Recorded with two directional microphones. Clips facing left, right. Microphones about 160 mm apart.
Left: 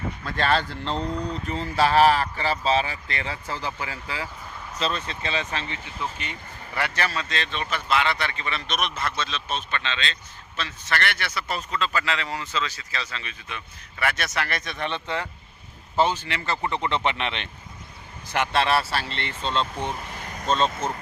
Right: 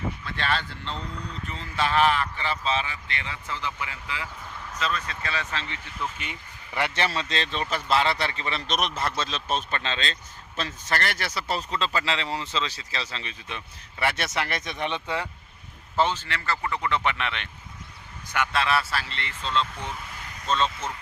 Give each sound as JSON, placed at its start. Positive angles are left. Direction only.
{"t": 0.2, "sound": "speech", "side_deg": 45}
{"t": 6.7, "sound": "a man's voice", "side_deg": -20}
{"t": 16.0, "sound": "speech", "side_deg": 15}
{"t": 19.7, "sound": "speech", "side_deg": 45}